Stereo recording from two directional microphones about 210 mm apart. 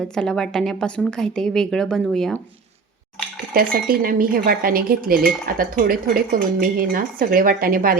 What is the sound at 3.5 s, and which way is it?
Cutlery, 45° right (ahead or behind).